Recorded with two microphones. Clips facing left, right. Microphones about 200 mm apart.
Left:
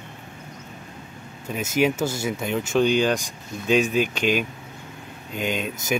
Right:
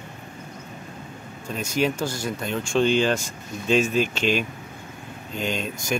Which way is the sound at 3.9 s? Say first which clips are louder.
Left 1 dB; 50° left (ahead or behind).